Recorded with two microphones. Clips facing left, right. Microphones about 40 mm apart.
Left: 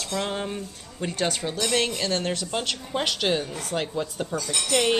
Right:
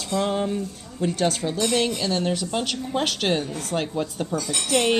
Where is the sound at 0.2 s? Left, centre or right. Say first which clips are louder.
Right 5 dB; centre.